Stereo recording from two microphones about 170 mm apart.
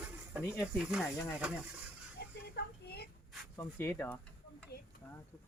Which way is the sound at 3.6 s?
15° left (ahead or behind).